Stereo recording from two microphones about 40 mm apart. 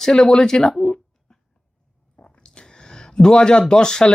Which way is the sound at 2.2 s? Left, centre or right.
Left.